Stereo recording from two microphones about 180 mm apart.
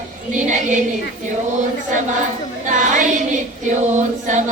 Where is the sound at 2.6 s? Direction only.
45° right (ahead or behind).